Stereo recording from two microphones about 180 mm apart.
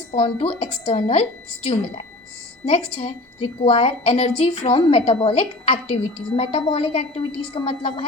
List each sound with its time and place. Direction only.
0.1 s a woman's voice: 35° left (ahead or behind)